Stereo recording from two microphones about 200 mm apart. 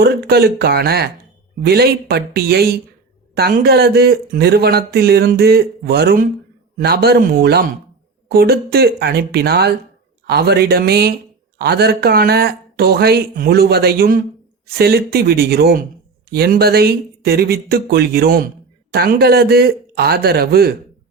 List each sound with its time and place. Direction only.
0.0 s speech: 55° right (ahead or behind)